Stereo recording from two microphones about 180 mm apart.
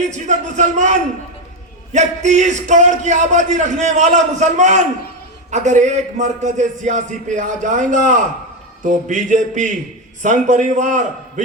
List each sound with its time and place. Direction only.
0.0 s a man's voice: 40° right (ahead or behind)